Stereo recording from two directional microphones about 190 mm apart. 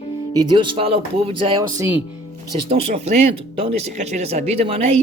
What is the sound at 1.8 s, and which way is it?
Speech, 10° right (ahead or behind).